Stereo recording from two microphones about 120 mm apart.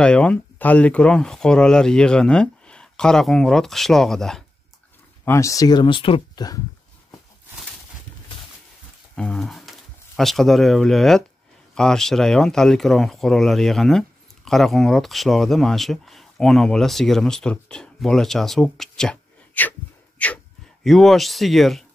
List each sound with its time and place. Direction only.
0.0 s speech: 10° left (ahead or behind)
5.2 s speech: 25° left (ahead or behind); by 6.4 s 45° left (ahead or behind)
9.1 s speech: 5° left (ahead or behind)
20.8 s speech: centre (ahead or behind)